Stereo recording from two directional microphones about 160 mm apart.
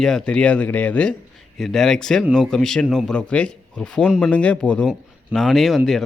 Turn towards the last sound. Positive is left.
turn(degrees=0)  # may be behind; listen again after turning